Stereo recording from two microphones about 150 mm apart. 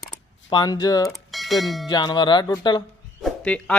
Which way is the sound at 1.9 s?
30° left (ahead or behind).